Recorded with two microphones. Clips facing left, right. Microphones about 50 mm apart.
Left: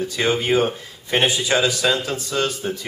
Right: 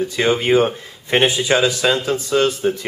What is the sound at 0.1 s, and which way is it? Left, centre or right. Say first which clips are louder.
Speech: right 3 dB; right.